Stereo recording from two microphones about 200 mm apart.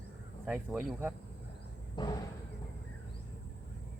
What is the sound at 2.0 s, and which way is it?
Speech, 20° left (ahead or behind).